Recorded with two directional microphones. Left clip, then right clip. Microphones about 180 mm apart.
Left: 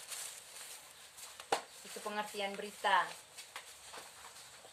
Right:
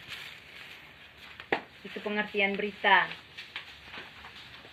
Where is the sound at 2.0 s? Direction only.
25° left (ahead or behind).